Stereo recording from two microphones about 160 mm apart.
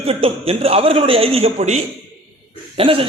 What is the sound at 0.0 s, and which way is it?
A man's voice, 35° right (ahead or behind).